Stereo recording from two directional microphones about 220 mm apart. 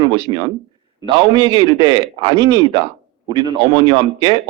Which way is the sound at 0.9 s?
20° right (ahead or behind).